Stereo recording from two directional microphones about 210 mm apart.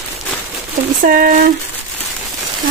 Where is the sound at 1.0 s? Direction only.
45° right (ahead or behind).